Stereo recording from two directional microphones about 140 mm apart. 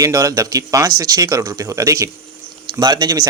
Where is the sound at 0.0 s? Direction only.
25° right (ahead or behind).